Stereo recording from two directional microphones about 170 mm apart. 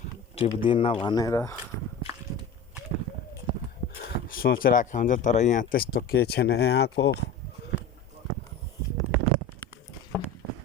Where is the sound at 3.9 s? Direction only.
60° left (ahead or behind); by 7.1 s 75° left (ahead or behind).